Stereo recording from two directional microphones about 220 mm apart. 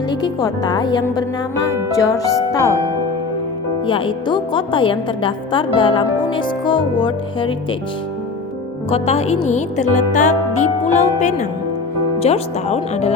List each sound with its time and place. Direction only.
0.1 s a woman's voice: 15° left (ahead or behind)
3.8 s a woman's voice: 25° left (ahead or behind)
8.9 s a woman's voice: 30° left (ahead or behind)
9.4 s music: 30° left (ahead or behind)
12.2 s a woman's voice: 30° left (ahead or behind)